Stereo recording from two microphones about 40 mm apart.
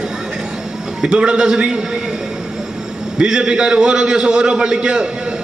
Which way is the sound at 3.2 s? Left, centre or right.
Right.